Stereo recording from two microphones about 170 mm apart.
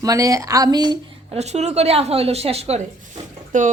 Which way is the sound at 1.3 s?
40° right (ahead or behind).